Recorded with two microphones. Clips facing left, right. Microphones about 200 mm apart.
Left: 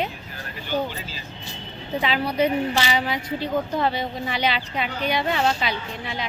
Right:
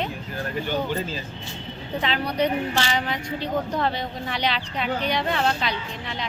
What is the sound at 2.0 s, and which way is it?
A woman's voice, 5° left (ahead or behind).